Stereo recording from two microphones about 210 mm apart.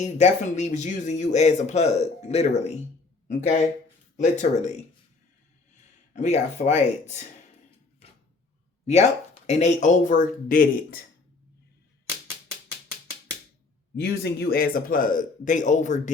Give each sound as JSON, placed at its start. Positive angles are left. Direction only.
{"t": 0.0, "sound": "speech", "side_deg": 35}
{"t": 5.7, "sound": "speech", "side_deg": 35}
{"t": 8.9, "sound": "speech", "side_deg": 30}
{"t": 13.9, "sound": "speech", "side_deg": 50}